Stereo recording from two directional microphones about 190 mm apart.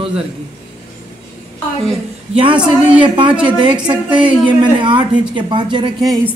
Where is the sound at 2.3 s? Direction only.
25° right (ahead or behind).